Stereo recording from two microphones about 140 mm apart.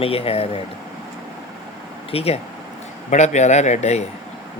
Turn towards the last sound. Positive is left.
turn(degrees=55)  # may be behind; listen again after turning